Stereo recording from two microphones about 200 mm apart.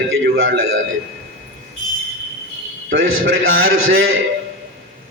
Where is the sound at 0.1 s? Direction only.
80° right.